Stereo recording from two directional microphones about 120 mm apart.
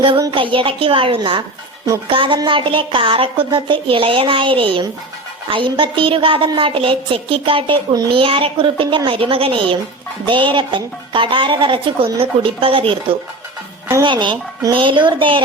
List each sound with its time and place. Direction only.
0.3 s speech: 45° right (ahead or behind)